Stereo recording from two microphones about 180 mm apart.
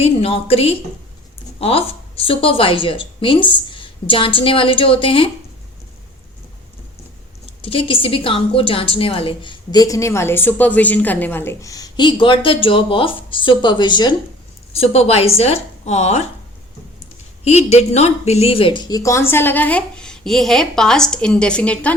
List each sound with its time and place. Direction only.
0.0 s a woman's voice: 30° left (ahead or behind)
7.6 s a woman's voice: 30° left (ahead or behind)
17.4 s a woman's voice: 35° left (ahead or behind); by 21.9 s 5° left (ahead or behind)